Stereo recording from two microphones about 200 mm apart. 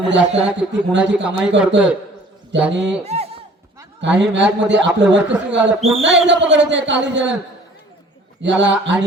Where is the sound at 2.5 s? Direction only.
65° right (ahead or behind).